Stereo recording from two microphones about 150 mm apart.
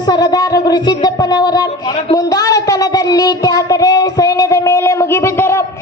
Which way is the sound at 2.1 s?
25° left (ahead or behind).